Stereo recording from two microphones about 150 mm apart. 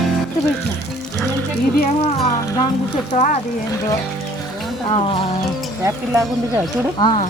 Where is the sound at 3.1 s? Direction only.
50° left (ahead or behind).